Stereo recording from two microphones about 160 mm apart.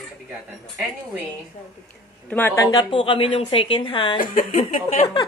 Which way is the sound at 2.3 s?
15° left (ahead or behind).